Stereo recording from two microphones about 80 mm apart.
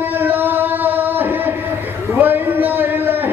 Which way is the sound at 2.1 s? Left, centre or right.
Right.